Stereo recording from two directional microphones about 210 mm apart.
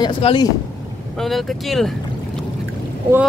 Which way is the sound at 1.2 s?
Centre (ahead or behind).